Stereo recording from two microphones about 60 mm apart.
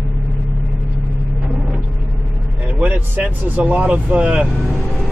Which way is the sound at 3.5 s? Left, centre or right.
Right.